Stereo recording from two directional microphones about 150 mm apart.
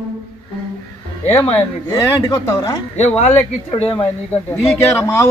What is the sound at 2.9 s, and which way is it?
Speech, 45° left (ahead or behind).